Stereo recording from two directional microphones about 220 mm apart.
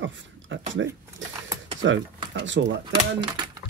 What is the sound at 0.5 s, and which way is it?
Speech, 60° right (ahead or behind).